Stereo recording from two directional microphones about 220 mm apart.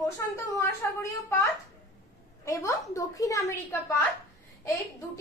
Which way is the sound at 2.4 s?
15° left (ahead or behind).